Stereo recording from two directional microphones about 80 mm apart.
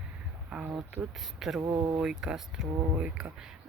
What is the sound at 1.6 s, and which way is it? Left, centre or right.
Speech, right.